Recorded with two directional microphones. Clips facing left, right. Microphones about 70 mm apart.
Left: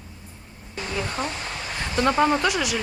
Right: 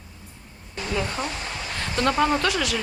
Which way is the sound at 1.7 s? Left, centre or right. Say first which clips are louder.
Left 1 dB; centre.